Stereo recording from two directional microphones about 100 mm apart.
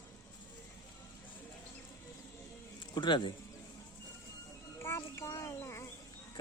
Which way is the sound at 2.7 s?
50° left (ahead or behind).